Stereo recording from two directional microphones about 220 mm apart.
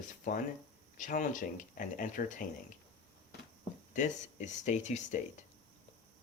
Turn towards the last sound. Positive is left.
turn(degrees=30)  # may be behind; listen again after turning